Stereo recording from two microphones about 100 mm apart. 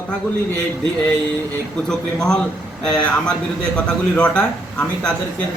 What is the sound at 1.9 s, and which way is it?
Speech, 5° left (ahead or behind).